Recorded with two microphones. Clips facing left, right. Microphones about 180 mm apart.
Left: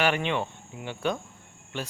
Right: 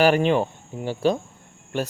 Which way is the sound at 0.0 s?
40° right (ahead or behind).